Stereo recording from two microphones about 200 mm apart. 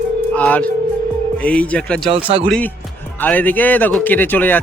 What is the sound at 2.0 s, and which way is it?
Speech, 25° right (ahead or behind).